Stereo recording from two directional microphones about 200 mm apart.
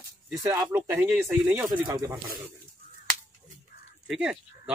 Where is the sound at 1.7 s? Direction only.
20° right (ahead or behind).